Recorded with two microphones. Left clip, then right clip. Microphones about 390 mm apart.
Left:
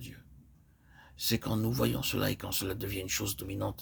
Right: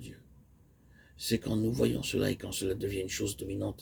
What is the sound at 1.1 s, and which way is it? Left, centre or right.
Speech, left.